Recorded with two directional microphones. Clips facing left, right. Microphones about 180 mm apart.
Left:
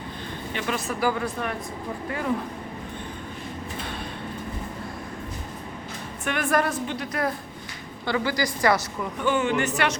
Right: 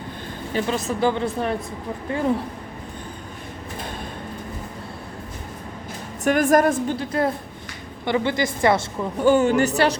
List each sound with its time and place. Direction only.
0.5 s speech: 25° right (ahead or behind)
6.2 s a woman's voice: 45° right (ahead or behind)
6.9 s speech: 30° right (ahead or behind)
9.2 s speech: 40° right (ahead or behind)